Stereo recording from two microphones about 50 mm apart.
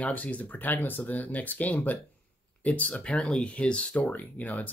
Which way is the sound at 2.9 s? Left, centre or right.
Centre.